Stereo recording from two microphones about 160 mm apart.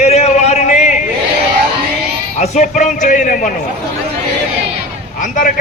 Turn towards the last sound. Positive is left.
turn(degrees=55)  # may be behind; listen again after turning